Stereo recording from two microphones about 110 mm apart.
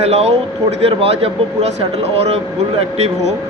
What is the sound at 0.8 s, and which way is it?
Speech, 60° right (ahead or behind).